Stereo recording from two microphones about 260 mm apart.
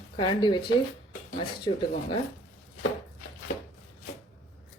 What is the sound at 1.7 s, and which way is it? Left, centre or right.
Speech, centre.